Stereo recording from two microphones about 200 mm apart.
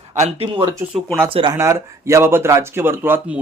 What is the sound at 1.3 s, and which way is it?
Speech, 20° right (ahead or behind).